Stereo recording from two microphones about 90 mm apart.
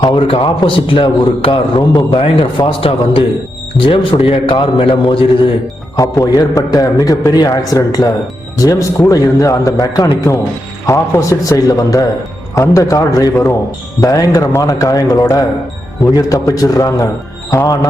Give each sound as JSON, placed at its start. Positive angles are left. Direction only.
{"t": 0.0, "sound": "a man's voice", "side_deg": 55}
{"t": 0.3, "sound": "a man's voice", "side_deg": 80}
{"t": 2.0, "sound": "a man's voice", "side_deg": 90}
{"t": 6.0, "sound": "a man's voice", "side_deg": 40}